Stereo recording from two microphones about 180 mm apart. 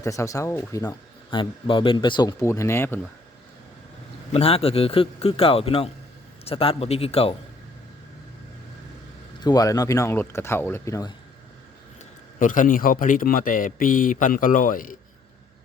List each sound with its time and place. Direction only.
0.0 s speech: 15° left (ahead or behind)
4.3 s a man's voice: 35° left (ahead or behind)
9.4 s speech: 20° left (ahead or behind)
12.4 s speech: 45° left (ahead or behind)